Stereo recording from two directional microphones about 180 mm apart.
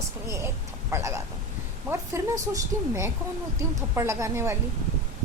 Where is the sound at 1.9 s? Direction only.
15° right (ahead or behind).